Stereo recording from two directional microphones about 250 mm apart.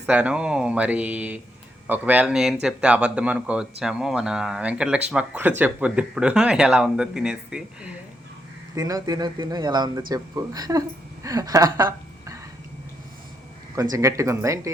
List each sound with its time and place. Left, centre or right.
0.0 s speech: centre
8.7 s a woman's voice: centre
13.9 s speech: centre